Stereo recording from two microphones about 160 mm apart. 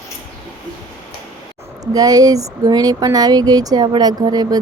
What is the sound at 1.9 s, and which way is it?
A woman's voice, 25° right (ahead or behind).